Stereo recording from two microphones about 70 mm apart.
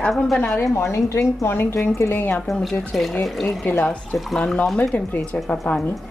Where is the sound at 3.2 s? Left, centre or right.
Centre.